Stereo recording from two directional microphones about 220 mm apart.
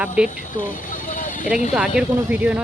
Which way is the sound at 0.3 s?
35° left (ahead or behind).